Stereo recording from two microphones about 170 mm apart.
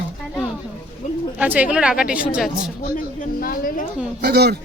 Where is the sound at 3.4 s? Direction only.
55° left (ahead or behind).